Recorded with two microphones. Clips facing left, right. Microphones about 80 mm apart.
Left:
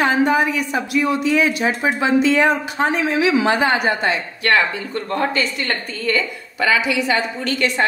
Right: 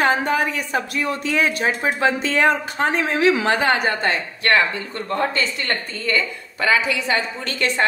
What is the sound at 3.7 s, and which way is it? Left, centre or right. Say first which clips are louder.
Speech: left 2 dB; centre.